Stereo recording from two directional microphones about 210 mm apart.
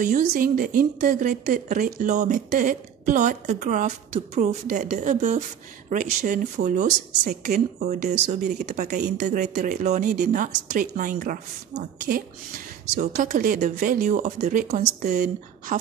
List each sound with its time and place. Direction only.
0.0 s a woman's voice: 40° right (ahead or behind)